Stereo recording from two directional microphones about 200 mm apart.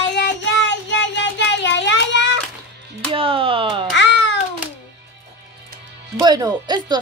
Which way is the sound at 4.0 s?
60° left (ahead or behind).